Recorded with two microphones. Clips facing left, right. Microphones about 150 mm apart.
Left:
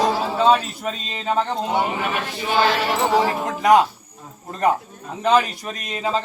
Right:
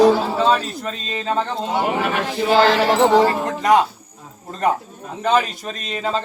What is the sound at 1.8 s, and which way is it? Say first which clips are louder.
Speech: right 4 dB; 70° right (ahead or behind).